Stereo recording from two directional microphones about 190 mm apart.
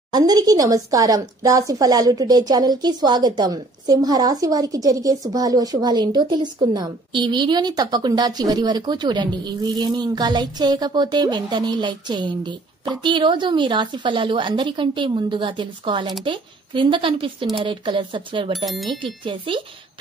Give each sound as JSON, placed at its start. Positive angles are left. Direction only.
{"t": 0.1, "sound": "speech", "side_deg": -20}
{"t": 18.7, "sound": "speech", "side_deg": 0}
{"t": 19.2, "sound": "speech", "side_deg": -25}